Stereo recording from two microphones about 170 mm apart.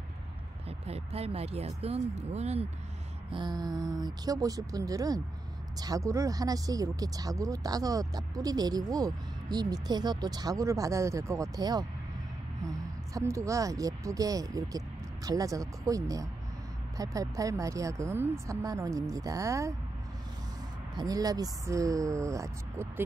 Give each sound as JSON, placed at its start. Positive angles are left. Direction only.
{"t": 0.7, "sound": "speech", "side_deg": -35}
{"t": 3.3, "sound": "speech", "side_deg": -25}
{"t": 20.9, "sound": "speech", "side_deg": -20}